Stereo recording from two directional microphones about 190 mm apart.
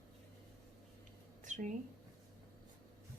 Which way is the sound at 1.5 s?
40° right (ahead or behind).